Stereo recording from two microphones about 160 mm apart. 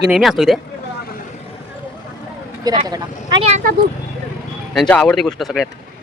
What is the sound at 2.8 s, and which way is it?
Speech, 25° right (ahead or behind).